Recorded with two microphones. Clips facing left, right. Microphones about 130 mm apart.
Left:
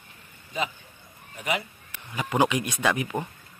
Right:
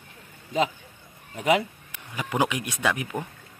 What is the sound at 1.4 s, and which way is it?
Speech, 90° right.